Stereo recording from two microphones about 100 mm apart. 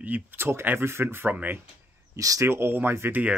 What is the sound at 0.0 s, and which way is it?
Speech, 20° right (ahead or behind).